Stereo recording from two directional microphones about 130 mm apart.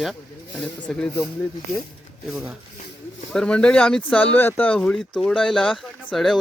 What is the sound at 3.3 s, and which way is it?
Speech, 5° left (ahead or behind).